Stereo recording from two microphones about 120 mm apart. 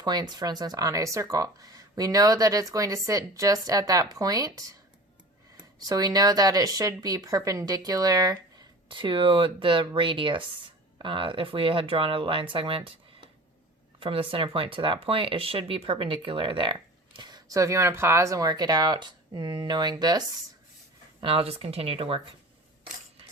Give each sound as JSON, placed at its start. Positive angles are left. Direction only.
{"t": 0.0, "sound": "speech", "side_deg": -35}
{"t": 8.9, "sound": "speech", "side_deg": -45}
{"t": 14.0, "sound": "speech", "side_deg": -50}
{"t": 21.2, "sound": "speech", "side_deg": -50}